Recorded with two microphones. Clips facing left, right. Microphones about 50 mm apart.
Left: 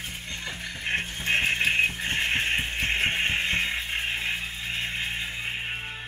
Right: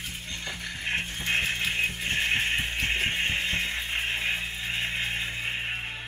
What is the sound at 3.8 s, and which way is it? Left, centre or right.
Music, centre.